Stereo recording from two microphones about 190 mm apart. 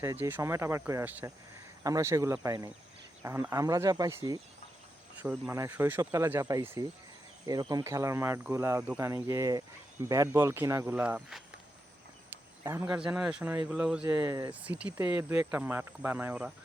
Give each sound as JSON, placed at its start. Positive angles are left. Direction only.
{"t": 0.0, "sound": "speech", "side_deg": -15}
{"t": 5.5, "sound": "speech", "side_deg": -10}
{"t": 12.6, "sound": "speech", "side_deg": -10}
{"t": 14.1, "sound": "speech", "side_deg": -20}
{"t": 14.6, "sound": "speech", "side_deg": -5}